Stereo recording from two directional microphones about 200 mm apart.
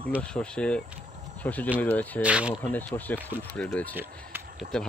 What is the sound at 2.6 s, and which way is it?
Speech, 10° left (ahead or behind).